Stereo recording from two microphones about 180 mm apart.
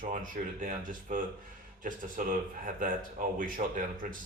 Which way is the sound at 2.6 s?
50° right (ahead or behind).